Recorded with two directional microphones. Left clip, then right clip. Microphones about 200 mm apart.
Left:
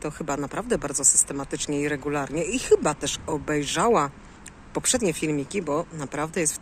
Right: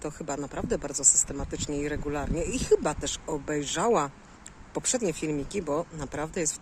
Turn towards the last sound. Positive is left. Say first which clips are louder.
# left 4 dB
turn(degrees=-5)  # may be behind; listen again after turning